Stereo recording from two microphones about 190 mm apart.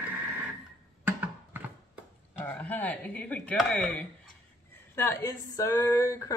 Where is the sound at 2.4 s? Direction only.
10° left (ahead or behind).